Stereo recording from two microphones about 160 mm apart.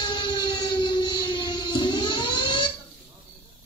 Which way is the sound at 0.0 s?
30° left (ahead or behind).